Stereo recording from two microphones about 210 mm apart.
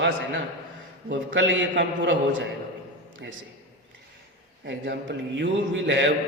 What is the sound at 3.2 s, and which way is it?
Speech, 55° right (ahead or behind).